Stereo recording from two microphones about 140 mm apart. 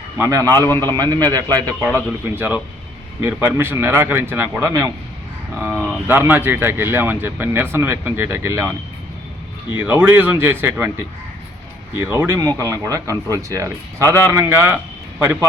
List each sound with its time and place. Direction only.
0.2 s a man's voice: 25° right (ahead or behind)
2.0 s speech: 10° right (ahead or behind)
9.7 s a man's voice: 15° right (ahead or behind)